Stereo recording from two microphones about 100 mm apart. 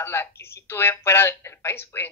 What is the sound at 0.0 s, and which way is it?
Speech, 25° left (ahead or behind).